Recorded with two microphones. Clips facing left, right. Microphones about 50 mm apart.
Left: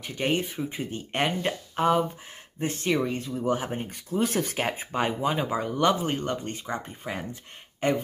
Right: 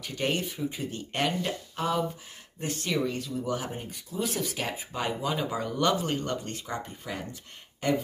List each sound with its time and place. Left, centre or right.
0.0 s speech: centre